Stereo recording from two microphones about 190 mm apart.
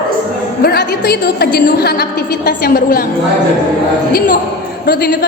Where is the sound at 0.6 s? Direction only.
55° left (ahead or behind).